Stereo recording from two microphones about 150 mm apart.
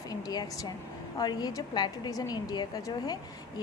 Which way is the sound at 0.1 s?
25° left (ahead or behind).